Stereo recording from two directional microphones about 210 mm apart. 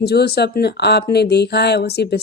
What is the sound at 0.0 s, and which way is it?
Speech, 50° left (ahead or behind).